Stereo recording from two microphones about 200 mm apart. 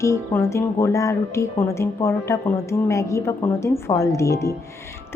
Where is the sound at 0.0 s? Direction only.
15° left (ahead or behind).